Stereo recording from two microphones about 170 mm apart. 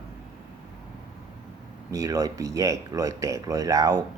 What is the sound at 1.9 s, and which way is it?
Speech, 20° right (ahead or behind).